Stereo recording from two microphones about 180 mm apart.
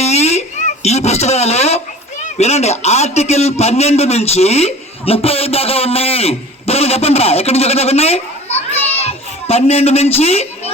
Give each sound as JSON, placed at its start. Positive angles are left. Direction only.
{"t": 0.0, "sound": "a sound", "side_deg": 35}
{"t": 2.2, "sound": "a man's voice", "side_deg": 35}
{"t": 9.0, "sound": "children playing", "side_deg": 35}